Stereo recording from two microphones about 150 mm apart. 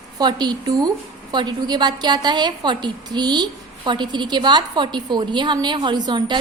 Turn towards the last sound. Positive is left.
turn(degrees=-30)  # may be behind; listen again after turning